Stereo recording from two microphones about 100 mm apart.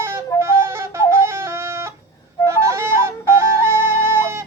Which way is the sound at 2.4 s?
30° right (ahead or behind).